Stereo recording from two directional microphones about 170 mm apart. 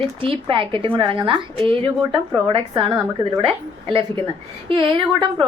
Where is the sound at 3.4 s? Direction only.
30° right (ahead or behind).